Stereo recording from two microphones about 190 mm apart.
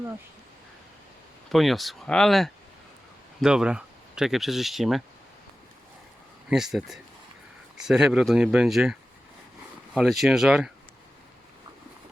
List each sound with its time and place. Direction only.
1.5 s speech: centre (ahead or behind)
6.5 s speech: centre (ahead or behind)